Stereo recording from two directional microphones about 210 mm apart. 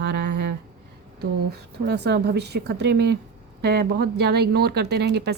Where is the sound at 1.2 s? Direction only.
50° right (ahead or behind).